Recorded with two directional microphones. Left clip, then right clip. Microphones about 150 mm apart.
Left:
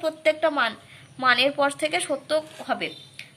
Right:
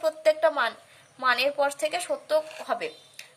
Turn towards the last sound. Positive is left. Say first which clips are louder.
# left 2 dB
turn(degrees=-40)  # may be behind; listen again after turning